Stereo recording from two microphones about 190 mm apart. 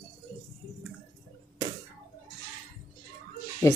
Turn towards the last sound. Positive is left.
turn(degrees=15)  # may be behind; listen again after turning